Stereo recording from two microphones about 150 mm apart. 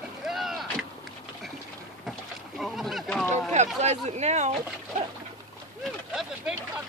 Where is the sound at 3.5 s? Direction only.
50° right (ahead or behind).